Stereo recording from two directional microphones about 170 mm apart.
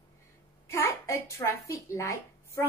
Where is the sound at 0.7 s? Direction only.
15° left (ahead or behind).